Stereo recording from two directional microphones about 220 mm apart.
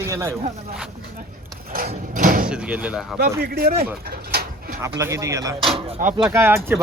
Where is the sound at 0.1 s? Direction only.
10° right (ahead or behind).